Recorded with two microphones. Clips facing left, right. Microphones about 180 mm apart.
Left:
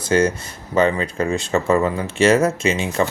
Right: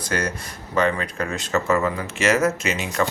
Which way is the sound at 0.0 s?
25° left (ahead or behind).